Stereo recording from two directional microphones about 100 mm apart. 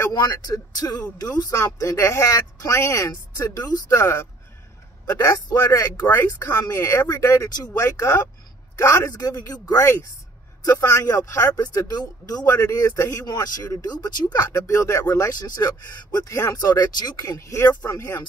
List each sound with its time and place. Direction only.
0.1 s speech: 45° left (ahead or behind)